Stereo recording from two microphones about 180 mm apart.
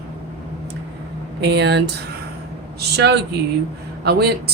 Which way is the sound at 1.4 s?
70° right (ahead or behind).